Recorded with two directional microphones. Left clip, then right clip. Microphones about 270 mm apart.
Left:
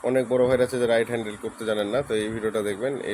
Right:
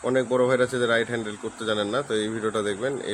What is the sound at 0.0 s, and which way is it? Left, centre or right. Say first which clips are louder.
Speech: left 1 dB; centre.